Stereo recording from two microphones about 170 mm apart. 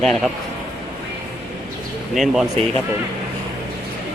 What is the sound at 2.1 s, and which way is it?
Speech, centre (ahead or behind).